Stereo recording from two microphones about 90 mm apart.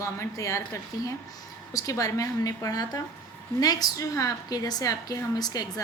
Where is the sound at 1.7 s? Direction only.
40° left (ahead or behind).